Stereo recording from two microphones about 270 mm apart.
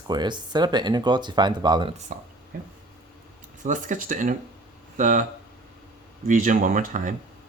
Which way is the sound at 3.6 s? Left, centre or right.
Right.